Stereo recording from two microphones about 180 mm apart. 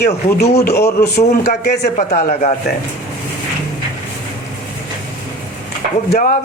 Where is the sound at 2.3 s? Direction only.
35° left (ahead or behind).